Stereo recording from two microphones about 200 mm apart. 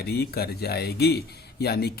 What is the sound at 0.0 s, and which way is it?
Speech, 55° left (ahead or behind).